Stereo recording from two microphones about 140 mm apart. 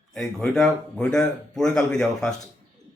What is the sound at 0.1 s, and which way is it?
A man's voice, centre (ahead or behind).